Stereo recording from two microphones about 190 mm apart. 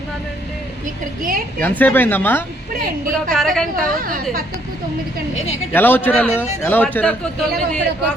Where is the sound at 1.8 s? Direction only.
10° left (ahead or behind).